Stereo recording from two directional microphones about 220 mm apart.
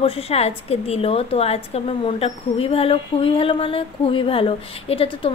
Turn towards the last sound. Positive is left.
turn(degrees=25)  # may be behind; listen again after turning